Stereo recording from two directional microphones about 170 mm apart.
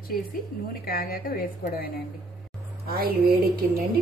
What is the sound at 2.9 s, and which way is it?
Speech, 65° right (ahead or behind).